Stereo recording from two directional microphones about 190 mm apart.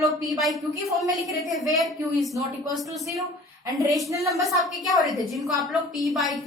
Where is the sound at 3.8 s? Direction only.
15° right (ahead or behind).